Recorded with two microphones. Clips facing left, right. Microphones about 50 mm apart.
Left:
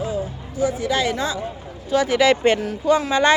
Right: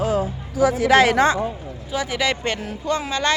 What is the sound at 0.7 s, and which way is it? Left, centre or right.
Speech, right.